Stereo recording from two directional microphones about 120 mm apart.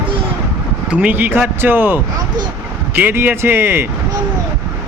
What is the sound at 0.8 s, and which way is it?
Speech, 10° right (ahead or behind).